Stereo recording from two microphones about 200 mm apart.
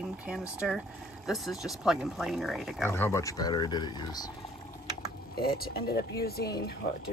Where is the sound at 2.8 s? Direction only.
10° left (ahead or behind).